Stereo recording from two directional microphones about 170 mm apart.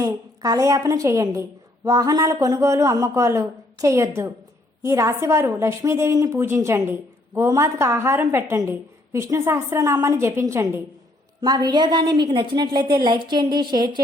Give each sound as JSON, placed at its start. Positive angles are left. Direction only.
{"t": 0.0, "sound": "a woman's voice", "side_deg": -20}